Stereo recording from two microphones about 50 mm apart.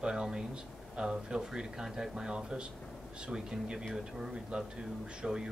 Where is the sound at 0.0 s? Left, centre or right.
Centre.